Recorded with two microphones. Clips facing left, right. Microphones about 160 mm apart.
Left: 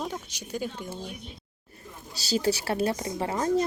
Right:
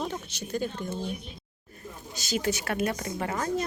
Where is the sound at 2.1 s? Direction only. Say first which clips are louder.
Left 3 dB; 35° left (ahead or behind).